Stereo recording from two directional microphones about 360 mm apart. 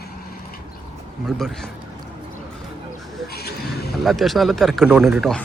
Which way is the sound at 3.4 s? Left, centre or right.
Left.